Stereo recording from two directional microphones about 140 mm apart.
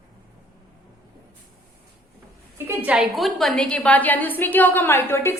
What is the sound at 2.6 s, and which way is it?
A woman's voice, 10° right (ahead or behind).